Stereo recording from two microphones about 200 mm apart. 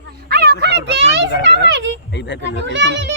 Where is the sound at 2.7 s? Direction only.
60° right (ahead or behind).